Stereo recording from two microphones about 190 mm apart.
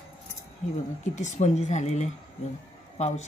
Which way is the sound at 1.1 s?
35° left (ahead or behind).